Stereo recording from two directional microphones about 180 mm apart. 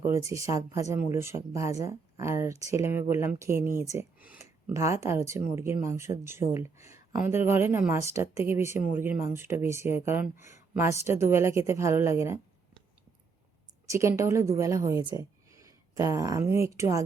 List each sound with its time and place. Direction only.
0.0 s speech: 15° right (ahead or behind)
13.8 s a woman's voice: 15° right (ahead or behind)